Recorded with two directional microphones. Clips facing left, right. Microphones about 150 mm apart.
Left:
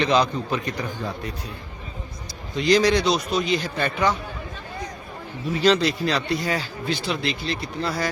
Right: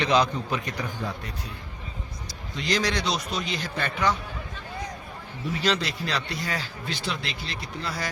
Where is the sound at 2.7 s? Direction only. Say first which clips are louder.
Left 8 dB; 10° left (ahead or behind).